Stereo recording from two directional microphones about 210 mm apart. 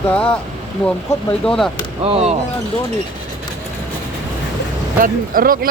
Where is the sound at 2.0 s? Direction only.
30° right (ahead or behind).